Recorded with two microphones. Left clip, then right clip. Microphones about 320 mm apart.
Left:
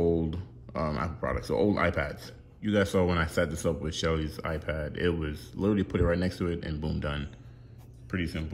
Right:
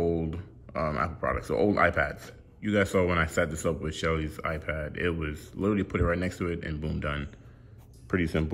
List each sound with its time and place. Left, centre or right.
0.0 s speech: centre